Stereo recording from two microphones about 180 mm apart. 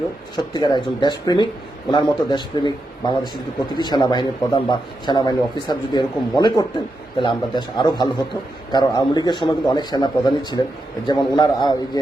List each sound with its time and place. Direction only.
0.3 s a man's voice: 25° left (ahead or behind)